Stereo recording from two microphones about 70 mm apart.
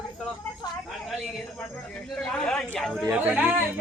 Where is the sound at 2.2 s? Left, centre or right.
Centre.